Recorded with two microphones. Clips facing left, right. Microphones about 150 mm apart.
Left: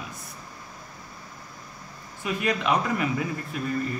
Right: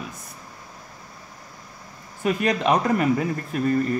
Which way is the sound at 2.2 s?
45° right (ahead or behind).